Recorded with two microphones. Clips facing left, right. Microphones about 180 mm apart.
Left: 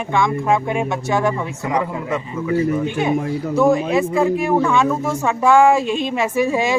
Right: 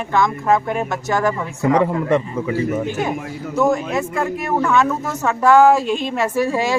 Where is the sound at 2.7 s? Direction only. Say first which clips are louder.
Left 1 dB; 45° right (ahead or behind).